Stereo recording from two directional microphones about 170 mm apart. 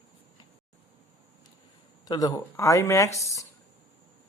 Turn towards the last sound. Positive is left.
turn(degrees=15)  # may be behind; listen again after turning